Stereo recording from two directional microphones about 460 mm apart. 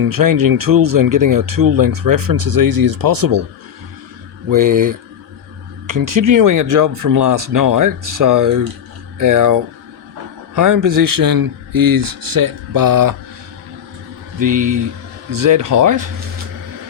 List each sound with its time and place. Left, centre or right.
0.0 s speech: right
4.5 s speech: right
5.9 s speech: right
14.4 s speech: right